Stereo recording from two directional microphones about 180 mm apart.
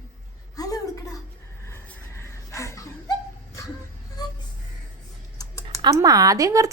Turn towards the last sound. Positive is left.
turn(degrees=-20)  # may be behind; listen again after turning